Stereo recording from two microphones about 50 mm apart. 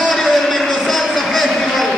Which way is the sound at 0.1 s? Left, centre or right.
Centre.